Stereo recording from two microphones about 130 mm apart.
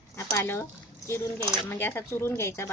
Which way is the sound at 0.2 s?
20° left (ahead or behind).